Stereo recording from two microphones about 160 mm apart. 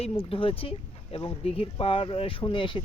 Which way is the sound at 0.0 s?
35° left (ahead or behind).